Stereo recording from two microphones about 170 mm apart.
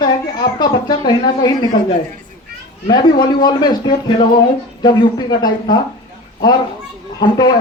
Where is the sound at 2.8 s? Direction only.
25° left (ahead or behind).